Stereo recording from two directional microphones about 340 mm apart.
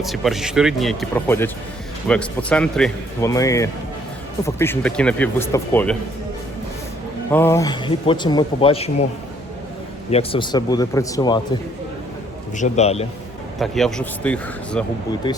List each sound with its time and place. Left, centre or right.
0.0 s speech: centre
7.3 s speech: centre
10.1 s speech: centre
12.5 s a man's voice: centre
13.6 s speech: centre